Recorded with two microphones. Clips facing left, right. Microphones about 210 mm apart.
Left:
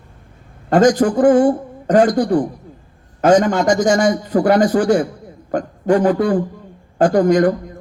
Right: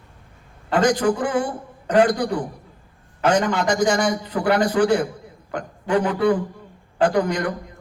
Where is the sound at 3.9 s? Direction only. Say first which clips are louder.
Left 7 dB; 45° left (ahead or behind).